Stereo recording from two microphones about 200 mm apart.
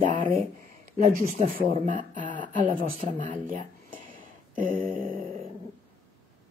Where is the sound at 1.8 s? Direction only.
40° right (ahead or behind).